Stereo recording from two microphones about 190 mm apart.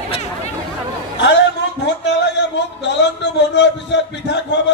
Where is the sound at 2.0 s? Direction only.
65° left (ahead or behind).